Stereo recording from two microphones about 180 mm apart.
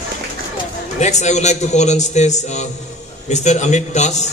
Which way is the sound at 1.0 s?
40° left (ahead or behind).